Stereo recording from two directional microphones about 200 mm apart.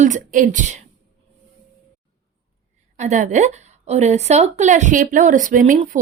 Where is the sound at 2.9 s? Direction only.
35° right (ahead or behind).